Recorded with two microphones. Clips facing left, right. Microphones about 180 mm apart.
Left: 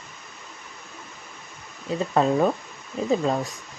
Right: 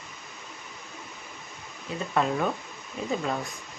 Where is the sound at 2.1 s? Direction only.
35° left (ahead or behind).